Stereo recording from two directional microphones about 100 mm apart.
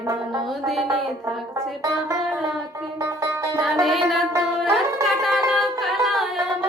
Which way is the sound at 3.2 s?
35° right (ahead or behind).